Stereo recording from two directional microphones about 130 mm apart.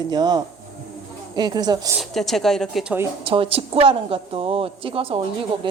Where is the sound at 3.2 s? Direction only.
45° right (ahead or behind).